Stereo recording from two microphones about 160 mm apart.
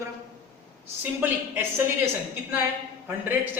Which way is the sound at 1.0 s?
10° right (ahead or behind).